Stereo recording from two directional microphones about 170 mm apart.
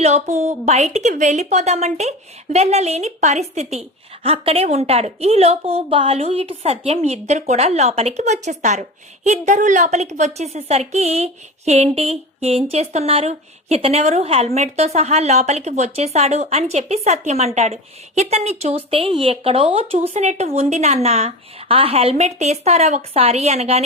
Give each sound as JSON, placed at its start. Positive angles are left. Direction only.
{"t": 0.0, "sound": "a woman's voice", "side_deg": -40}